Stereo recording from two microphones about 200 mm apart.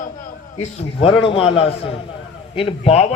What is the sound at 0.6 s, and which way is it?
A man's voice, 25° left (ahead or behind).